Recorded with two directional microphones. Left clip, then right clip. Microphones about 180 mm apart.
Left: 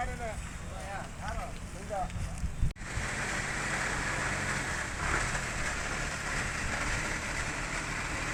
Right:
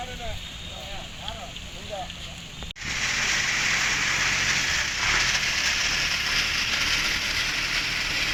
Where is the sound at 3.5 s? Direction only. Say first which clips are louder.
Right 10 dB; 30° left (ahead or behind).